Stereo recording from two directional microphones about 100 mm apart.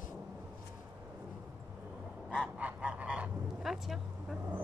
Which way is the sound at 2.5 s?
15° right (ahead or behind).